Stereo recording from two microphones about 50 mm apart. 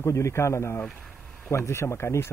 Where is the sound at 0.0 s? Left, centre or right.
Left.